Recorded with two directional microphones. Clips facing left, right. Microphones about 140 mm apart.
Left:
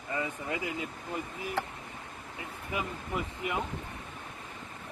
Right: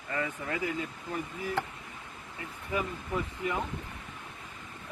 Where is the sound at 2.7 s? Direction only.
15° left (ahead or behind).